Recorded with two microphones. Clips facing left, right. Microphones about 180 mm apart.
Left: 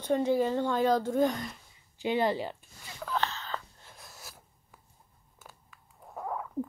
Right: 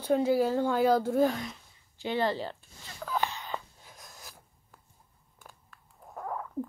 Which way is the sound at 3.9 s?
5° left (ahead or behind).